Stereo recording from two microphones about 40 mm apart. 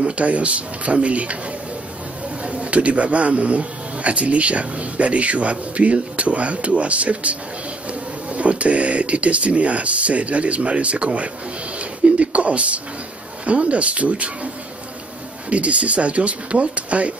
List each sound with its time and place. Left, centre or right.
0.0 s speech: right
2.4 s speech: right
15.5 s speech: right